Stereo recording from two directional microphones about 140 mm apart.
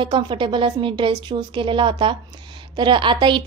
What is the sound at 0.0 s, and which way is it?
Speech, 35° right (ahead or behind).